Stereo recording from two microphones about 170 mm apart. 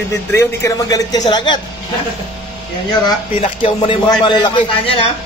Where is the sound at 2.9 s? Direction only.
30° left (ahead or behind).